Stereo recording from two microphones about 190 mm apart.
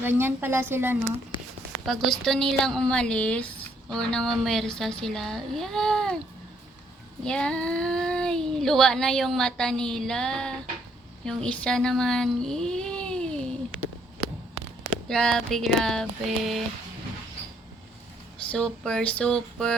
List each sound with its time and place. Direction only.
0.0 s a woman's voice: 10° right (ahead or behind)
1.3 s a sound: 25° left (ahead or behind)
2.0 s speech: centre (ahead or behind)
7.3 s speech: 5° left (ahead or behind)
15.0 s speech: 5° left (ahead or behind)
18.5 s speech: 5° left (ahead or behind)